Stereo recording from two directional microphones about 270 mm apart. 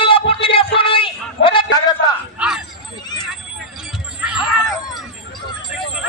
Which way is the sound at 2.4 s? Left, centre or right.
Centre.